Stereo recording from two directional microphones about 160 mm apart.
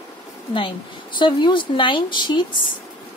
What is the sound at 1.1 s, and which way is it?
A woman's voice, 30° left (ahead or behind).